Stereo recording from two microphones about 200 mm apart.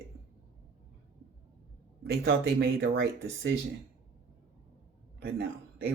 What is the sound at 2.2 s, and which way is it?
Speech, 55° right (ahead or behind).